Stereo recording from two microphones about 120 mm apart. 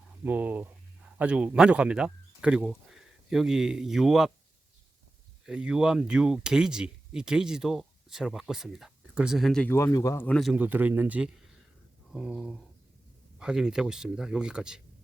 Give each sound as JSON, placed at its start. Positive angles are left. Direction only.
{"t": 0.3, "sound": "speech", "side_deg": -15}
{"t": 5.5, "sound": "speech", "side_deg": -5}
{"t": 9.6, "sound": "speech", "side_deg": 25}
{"t": 10.2, "sound": "speech", "side_deg": 10}
{"t": 10.6, "sound": "speech", "side_deg": -15}